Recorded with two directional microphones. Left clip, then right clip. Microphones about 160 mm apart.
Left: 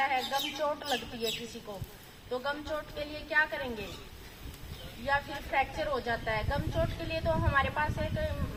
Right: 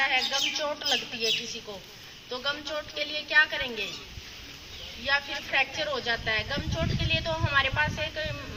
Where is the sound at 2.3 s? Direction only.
20° left (ahead or behind).